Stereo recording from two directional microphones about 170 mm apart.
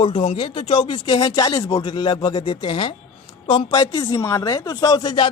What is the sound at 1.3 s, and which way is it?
A man's voice, 20° left (ahead or behind).